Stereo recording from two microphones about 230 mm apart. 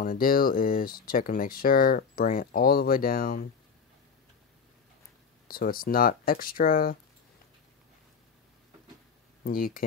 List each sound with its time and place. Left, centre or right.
0.0 s speech: left
5.5 s speech: left
9.4 s speech: left